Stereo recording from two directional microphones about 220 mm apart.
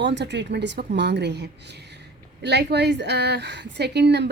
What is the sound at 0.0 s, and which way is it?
A woman's voice, 55° right (ahead or behind).